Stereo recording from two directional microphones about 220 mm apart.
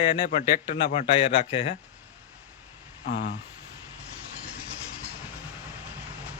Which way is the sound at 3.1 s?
55° left (ahead or behind).